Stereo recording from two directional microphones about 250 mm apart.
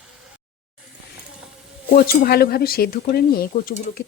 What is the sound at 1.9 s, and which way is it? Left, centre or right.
Speech, left.